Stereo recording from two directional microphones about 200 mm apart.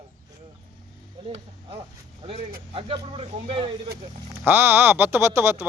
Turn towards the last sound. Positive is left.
turn(degrees=-15)  # may be behind; listen again after turning